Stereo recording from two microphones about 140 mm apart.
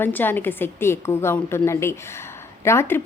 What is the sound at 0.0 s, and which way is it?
Speech, 15° left (ahead or behind).